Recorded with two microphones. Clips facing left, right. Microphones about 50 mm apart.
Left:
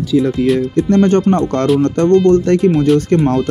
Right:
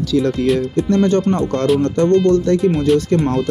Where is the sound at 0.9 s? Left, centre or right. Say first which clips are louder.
Left 3 dB; left.